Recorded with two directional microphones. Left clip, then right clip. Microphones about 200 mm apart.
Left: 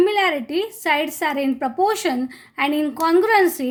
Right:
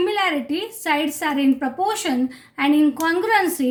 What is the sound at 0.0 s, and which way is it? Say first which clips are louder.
A woman's voice: left 3 dB; 40° left (ahead or behind).